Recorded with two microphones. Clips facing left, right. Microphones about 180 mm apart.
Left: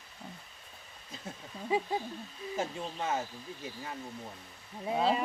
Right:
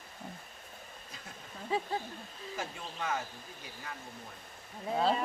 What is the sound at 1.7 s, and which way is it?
Speech, 15° left (ahead or behind).